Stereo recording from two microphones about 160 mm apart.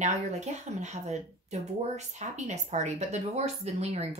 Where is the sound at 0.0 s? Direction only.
45° right (ahead or behind).